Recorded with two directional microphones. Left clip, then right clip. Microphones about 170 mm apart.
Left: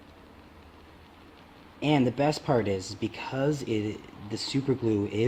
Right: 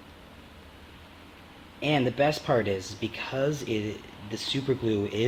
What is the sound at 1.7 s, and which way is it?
Speech, 45° left (ahead or behind).